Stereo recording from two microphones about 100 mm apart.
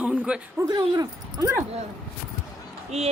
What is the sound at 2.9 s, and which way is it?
Speech, 90° right.